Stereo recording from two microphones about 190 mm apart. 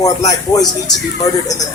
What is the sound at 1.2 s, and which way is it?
Speech, 20° left (ahead or behind).